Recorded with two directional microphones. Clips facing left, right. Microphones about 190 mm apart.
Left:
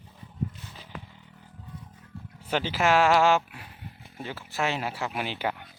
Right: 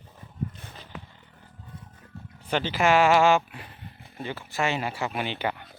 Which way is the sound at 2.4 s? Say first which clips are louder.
Right 1 dB; 5° left (ahead or behind).